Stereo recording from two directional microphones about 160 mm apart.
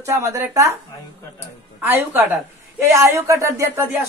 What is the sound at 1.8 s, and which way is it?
A man's voice, 15° right (ahead or behind).